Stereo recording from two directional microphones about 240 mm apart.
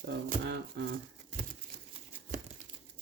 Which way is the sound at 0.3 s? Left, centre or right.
Right.